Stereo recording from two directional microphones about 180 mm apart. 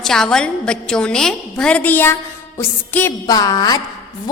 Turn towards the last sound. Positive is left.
turn(degrees=20)  # may be behind; listen again after turning